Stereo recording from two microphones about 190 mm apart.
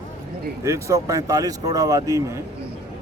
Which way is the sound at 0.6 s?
15° right (ahead or behind).